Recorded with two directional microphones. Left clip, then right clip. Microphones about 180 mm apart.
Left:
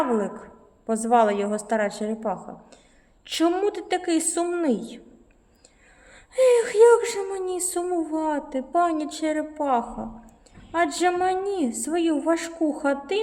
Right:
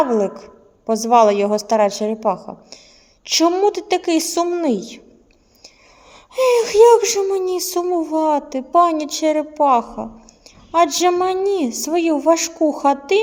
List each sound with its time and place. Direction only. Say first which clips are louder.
0.9 s a woman's voice: right 7 dB; 30° right (ahead or behind)
6.3 s speech: right 4 dB; 25° right (ahead or behind)